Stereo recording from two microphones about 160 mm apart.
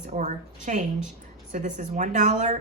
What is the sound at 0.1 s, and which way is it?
Speech, 50° right (ahead or behind).